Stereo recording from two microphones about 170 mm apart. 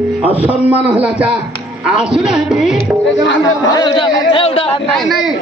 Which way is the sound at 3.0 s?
90° left.